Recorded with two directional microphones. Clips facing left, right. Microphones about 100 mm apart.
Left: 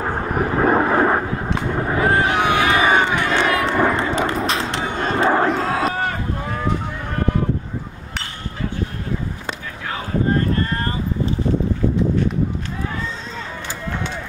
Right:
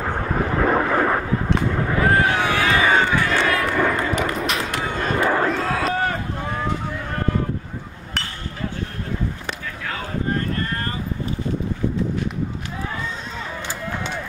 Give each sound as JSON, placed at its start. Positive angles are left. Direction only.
{"t": 0.6, "sound": "vehicle", "side_deg": 30}
{"t": 1.8, "sound": "crowd", "side_deg": 25}
{"t": 10.5, "sound": "a sound", "side_deg": 25}